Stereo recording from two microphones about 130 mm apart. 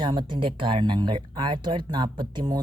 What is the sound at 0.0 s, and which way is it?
A woman's voice, 35° right (ahead or behind).